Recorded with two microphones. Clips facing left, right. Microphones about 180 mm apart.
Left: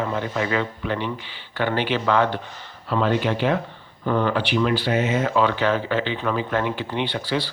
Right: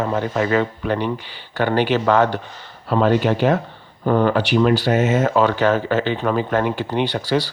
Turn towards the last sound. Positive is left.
turn(degrees=-45)  # may be behind; listen again after turning